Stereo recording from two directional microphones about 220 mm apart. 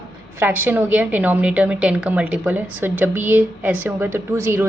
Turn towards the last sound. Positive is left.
turn(degrees=-10)  # may be behind; listen again after turning